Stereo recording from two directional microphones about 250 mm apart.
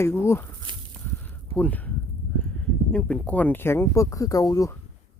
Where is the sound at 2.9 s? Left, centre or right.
Centre.